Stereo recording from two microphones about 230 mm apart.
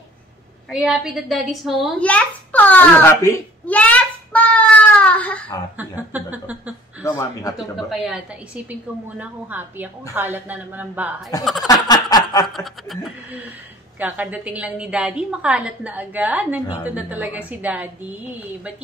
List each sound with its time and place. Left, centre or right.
0.7 s a child's voice: centre
5.8 s a woman's voice: centre
7.0 s a sound: centre
7.5 s a woman's voice: centre
9.2 s a woman's voice: centre
11.6 s a sound: centre
12.5 s a woman's voice: centre